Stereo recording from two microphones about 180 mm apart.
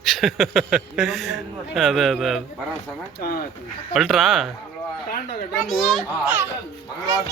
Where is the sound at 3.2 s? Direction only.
55° left (ahead or behind).